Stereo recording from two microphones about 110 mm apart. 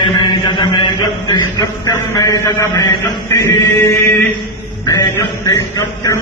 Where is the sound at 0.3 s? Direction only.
45° left (ahead or behind).